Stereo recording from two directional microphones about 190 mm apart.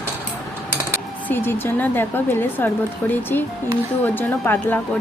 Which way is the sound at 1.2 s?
10° left (ahead or behind).